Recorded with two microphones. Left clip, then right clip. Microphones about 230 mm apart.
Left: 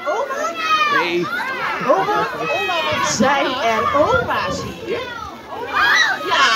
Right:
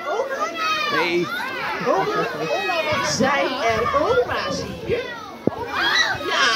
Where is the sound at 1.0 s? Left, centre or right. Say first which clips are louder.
Left 2 dB; centre.